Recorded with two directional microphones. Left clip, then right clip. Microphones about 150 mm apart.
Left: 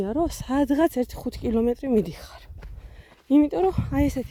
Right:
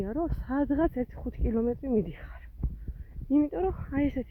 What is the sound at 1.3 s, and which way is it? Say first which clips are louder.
Speech: left 5 dB; 60° left (ahead or behind).